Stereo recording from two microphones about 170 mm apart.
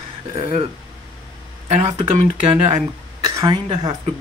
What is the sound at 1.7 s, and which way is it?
Speech, 40° right (ahead or behind).